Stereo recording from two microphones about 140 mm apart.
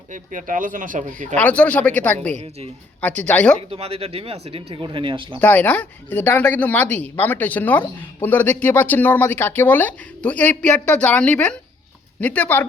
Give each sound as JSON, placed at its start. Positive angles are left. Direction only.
{"t": 0.1, "sound": "speech", "side_deg": -65}
{"t": 1.4, "sound": "speech", "side_deg": 10}
{"t": 2.3, "sound": "a woman's voice", "side_deg": -50}
{"t": 3.0, "sound": "speech", "side_deg": 10}
{"t": 3.7, "sound": "speech", "side_deg": -45}
{"t": 5.4, "sound": "speech", "side_deg": 10}